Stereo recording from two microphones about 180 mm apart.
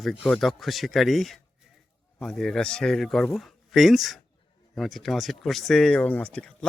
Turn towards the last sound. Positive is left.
turn(degrees=5)  # may be behind; listen again after turning